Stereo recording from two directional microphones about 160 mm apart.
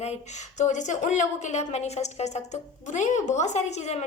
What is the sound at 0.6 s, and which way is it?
A woman's voice, 50° left (ahead or behind).